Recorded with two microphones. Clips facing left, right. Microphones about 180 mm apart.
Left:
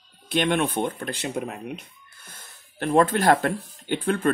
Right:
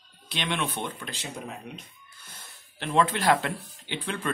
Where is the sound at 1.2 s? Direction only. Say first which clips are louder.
Left 8 dB; 60° left (ahead or behind).